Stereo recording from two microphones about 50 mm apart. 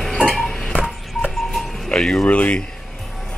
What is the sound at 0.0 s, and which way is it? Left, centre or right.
Dishes, centre.